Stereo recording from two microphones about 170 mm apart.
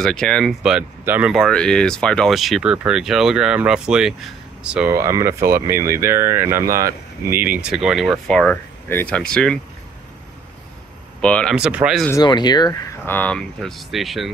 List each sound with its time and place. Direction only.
0.0 s speech: 5° left (ahead or behind)
1.3 s speech: 5° left (ahead or behind)
4.9 s speech: 15° right (ahead or behind); by 9.6 s 5° left (ahead or behind)
11.1 s speech: 5° left (ahead or behind)
11.5 s speech: 5° right (ahead or behind)
12.1 s speech: 25° left (ahead or behind)
13.0 s speech: 10° left (ahead or behind)